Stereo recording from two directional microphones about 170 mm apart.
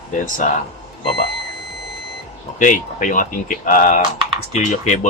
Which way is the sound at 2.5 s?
50° left (ahead or behind).